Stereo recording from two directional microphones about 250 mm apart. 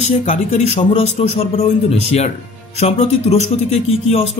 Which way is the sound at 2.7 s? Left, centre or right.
Left.